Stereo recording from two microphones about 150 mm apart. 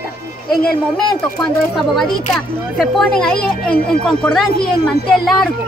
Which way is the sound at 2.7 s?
Centre (ahead or behind).